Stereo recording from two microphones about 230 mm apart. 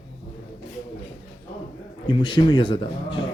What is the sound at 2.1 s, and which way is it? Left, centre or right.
Speech, centre.